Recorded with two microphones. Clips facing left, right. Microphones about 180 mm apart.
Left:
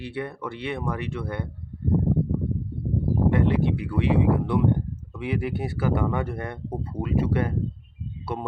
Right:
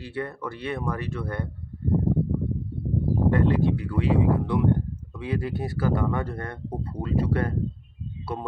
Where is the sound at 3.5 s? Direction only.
20° left (ahead or behind).